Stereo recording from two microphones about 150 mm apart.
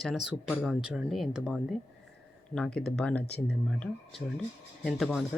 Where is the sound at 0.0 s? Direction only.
Centre (ahead or behind).